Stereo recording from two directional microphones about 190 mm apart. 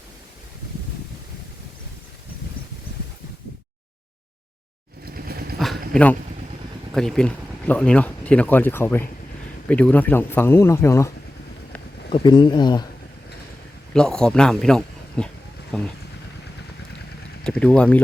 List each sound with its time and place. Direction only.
5.0 s vehicle: 55° right (ahead or behind)
5.9 s speech: 5° left (ahead or behind)
12.1 s speech: 25° left (ahead or behind)
13.9 s speech: 5° left (ahead or behind)
17.4 s speech: 5° left (ahead or behind)